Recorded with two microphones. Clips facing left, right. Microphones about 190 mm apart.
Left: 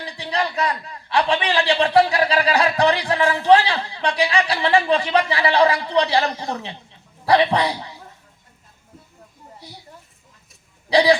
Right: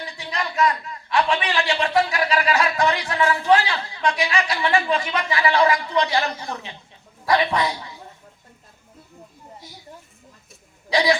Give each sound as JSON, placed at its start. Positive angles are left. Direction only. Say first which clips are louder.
{"t": 0.0, "sound": "a man's voice", "louder": "left 5 dB", "side_deg": 35}
{"t": 10.9, "sound": "a man's voice", "louder": "left 4 dB", "side_deg": 35}